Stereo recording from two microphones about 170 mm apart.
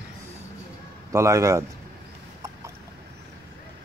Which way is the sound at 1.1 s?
20° right (ahead or behind).